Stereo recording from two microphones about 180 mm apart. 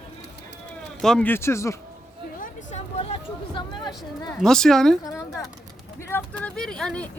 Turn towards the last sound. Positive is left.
turn(degrees=5)  # may be behind; listen again after turning